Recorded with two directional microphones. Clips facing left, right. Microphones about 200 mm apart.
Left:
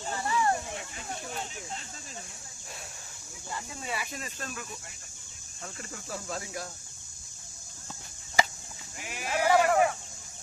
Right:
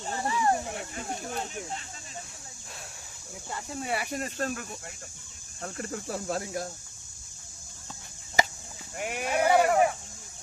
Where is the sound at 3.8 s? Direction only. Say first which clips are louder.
Right 7 dB; 60° right (ahead or behind).